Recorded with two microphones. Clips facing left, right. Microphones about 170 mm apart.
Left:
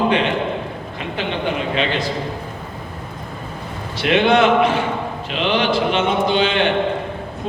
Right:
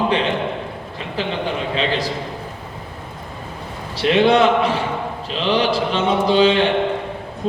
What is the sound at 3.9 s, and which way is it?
A man's voice, 35° right (ahead or behind).